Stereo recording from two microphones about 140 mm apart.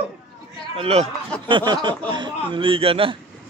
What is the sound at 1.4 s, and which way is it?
Speech, 35° right (ahead or behind).